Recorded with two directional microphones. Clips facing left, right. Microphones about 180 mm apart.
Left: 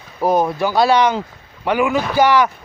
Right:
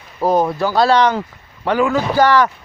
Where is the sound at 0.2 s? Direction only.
15° left (ahead or behind).